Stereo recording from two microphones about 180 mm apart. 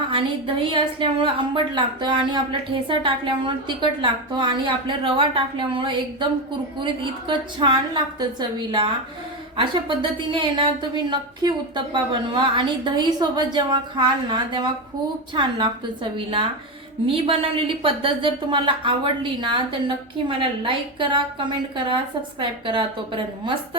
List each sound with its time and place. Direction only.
0.1 s a woman's voice: 30° right (ahead or behind)